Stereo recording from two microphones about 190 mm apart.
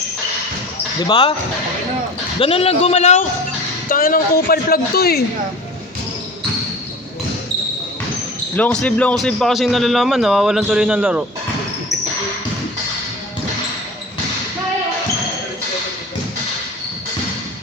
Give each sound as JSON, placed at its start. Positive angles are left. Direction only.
{"t": 0.9, "sound": "speech", "side_deg": 25}
{"t": 2.4, "sound": "a man's voice", "side_deg": 30}
{"t": 3.8, "sound": "speech", "side_deg": 50}
{"t": 8.5, "sound": "a man's voice", "side_deg": 5}